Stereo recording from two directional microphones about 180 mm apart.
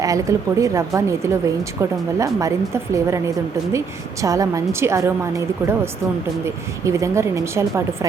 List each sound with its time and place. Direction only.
0.0 s a woman's voice: 20° right (ahead or behind)